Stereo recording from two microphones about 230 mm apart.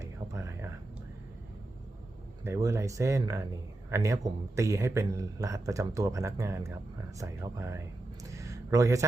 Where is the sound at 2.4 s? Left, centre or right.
Centre.